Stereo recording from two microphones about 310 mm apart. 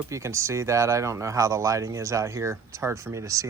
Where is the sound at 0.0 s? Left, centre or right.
Centre.